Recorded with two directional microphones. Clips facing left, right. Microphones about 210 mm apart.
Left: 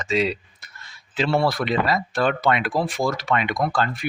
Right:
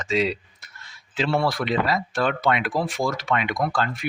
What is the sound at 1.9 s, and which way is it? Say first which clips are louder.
Speech: left 2 dB; 40° left (ahead or behind).